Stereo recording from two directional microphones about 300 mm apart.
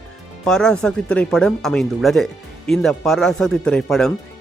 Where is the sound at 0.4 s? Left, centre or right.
Centre.